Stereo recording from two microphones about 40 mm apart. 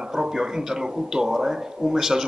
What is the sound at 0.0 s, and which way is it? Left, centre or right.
Speech, centre.